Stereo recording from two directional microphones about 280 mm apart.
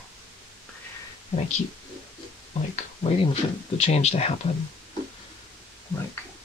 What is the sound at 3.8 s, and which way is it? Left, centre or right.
Speech, left.